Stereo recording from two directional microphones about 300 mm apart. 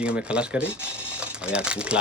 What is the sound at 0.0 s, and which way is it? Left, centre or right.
Speech, centre.